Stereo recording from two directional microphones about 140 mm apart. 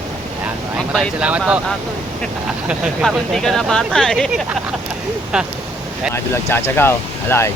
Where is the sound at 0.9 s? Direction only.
10° right (ahead or behind).